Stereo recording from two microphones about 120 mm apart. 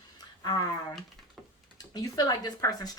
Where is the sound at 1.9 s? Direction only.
30° left (ahead or behind).